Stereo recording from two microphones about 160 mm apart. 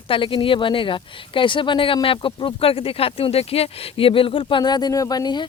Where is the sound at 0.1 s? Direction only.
35° left (ahead or behind).